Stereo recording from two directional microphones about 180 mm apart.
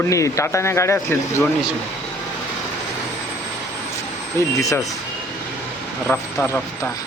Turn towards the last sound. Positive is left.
turn(degrees=10)  # may be behind; listen again after turning